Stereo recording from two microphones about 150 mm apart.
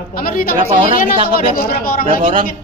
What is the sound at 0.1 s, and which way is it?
Speech, 75° left (ahead or behind).